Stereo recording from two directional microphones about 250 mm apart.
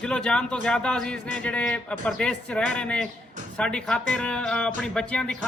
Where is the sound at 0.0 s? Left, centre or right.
Centre.